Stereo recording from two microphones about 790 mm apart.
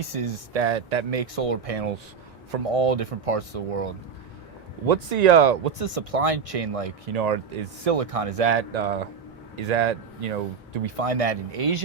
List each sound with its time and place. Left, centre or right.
0.0 s speech: right
4.9 s speech: right
10.8 s speech: right